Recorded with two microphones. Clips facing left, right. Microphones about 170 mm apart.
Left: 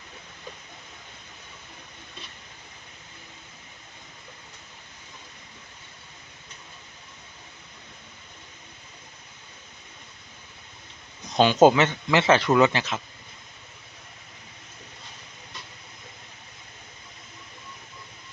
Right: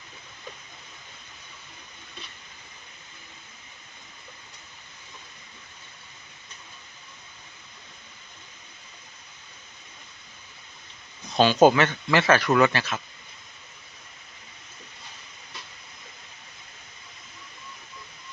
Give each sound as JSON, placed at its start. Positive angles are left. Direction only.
{"t": 11.3, "sound": "speech", "side_deg": 20}